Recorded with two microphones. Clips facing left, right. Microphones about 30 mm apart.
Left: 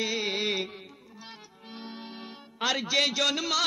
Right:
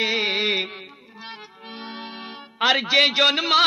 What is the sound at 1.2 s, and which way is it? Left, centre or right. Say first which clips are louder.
Speech: right 10 dB; right.